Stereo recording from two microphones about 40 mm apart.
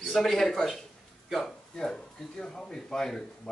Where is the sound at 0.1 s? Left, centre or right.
Centre.